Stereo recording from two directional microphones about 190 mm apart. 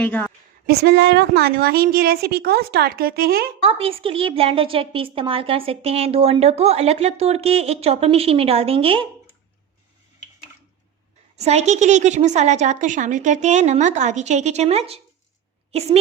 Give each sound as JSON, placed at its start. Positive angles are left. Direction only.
{"t": 0.0, "sound": "a woman's voice", "side_deg": 5}
{"t": 0.7, "sound": "a woman's voice", "side_deg": -60}
{"t": 3.6, "sound": "a woman's voice", "side_deg": -30}
{"t": 11.3, "sound": "a woman's voice", "side_deg": -35}